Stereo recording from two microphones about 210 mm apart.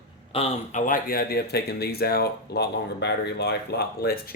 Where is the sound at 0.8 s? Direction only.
45° left (ahead or behind).